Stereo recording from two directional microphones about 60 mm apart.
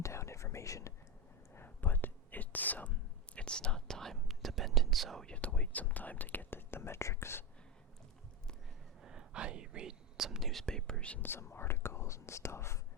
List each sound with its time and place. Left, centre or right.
0.0 s whispering: left
1.5 s whispering: left
3.3 s whispering: centre
5.2 s speech: left
9.0 s whispering: centre
10.7 s whispering: centre
11.2 s speech: left